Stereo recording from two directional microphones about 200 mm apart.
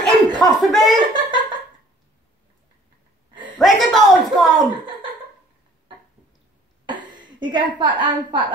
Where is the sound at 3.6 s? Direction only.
Centre (ahead or behind).